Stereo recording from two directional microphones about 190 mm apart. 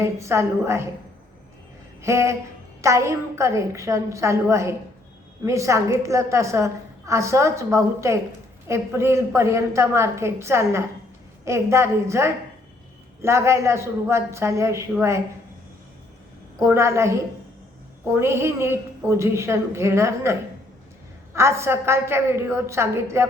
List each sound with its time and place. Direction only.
0.0 s a woman's voice: 15° right (ahead or behind)
2.0 s a sound: 15° right (ahead or behind)
2.8 s a woman's voice: 15° right (ahead or behind)
16.6 s a woman's voice: 15° right (ahead or behind)
21.3 s a woman's voice: 15° right (ahead or behind)